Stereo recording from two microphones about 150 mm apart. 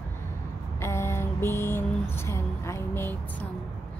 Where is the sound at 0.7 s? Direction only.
15° left (ahead or behind).